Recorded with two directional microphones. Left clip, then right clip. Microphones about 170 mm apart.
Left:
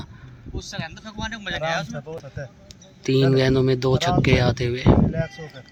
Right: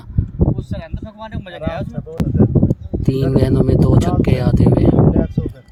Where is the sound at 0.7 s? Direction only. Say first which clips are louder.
Right 2 dB; 50° right (ahead or behind).